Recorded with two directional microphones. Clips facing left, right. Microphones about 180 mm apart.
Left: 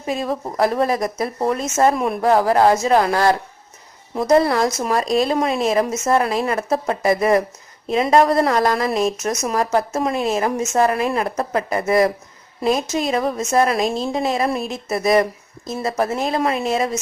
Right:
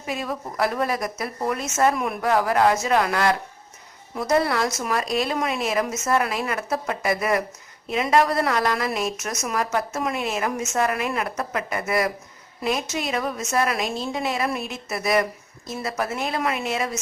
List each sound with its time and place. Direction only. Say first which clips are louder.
0.0 s a woman's voice: left 6 dB; 35° left (ahead or behind)